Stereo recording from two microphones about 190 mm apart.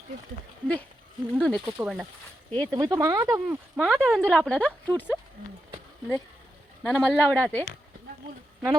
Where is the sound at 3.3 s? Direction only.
Centre (ahead or behind).